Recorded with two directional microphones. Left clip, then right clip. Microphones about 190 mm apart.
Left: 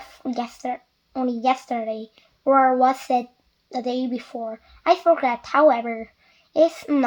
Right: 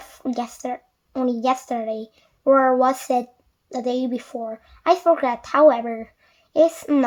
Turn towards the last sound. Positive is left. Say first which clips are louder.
# right 1 dB
turn(degrees=-25)  # may be behind; listen again after turning